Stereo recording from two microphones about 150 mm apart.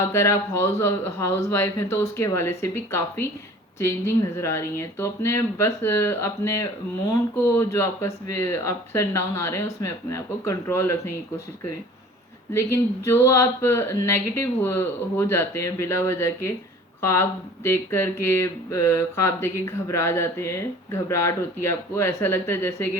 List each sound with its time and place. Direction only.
0.0 s speech: 20° left (ahead or behind)
12.5 s speech: 20° left (ahead or behind)